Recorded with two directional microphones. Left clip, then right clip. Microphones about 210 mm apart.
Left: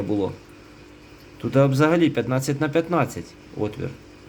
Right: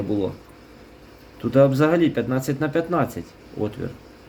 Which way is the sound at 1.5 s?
15° left (ahead or behind).